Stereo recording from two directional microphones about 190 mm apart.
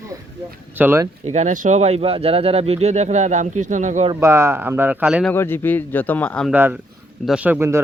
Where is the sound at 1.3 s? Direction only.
40° right (ahead or behind).